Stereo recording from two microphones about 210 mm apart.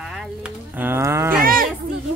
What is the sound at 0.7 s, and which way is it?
Cattle, 10° right (ahead or behind).